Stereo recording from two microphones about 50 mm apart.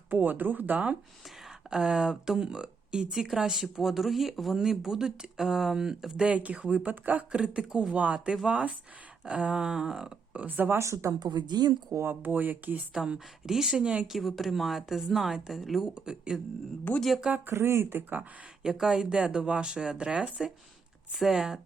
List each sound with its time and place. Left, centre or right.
0.1 s speech: right
1.7 s speech: centre
6.2 s speech: right
7.3 s speech: centre
7.9 s speech: right; by 10.1 s centre
10.3 s speech: right
10.7 s speech: right
12.0 s speech: right
12.9 s speech: centre
14.1 s a woman's voice: centre
16.0 s speech: centre
17.5 s speech: right
18.6 s speech: centre
21.1 s a woman's voice: centre